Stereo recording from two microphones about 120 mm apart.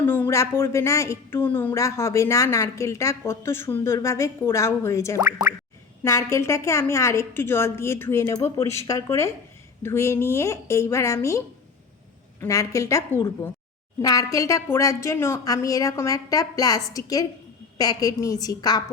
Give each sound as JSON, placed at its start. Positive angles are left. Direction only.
{"t": 0.0, "sound": "a woman's voice", "side_deg": 15}